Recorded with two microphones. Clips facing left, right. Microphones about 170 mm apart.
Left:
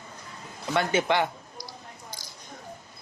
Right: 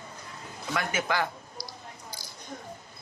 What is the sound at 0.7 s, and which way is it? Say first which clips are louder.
Speech: left 5 dB; 25° left (ahead or behind).